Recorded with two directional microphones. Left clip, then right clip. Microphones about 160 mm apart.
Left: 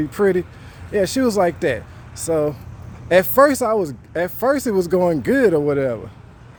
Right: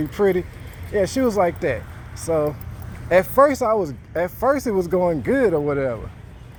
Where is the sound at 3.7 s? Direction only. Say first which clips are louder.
Left 1 dB; 65° left (ahead or behind).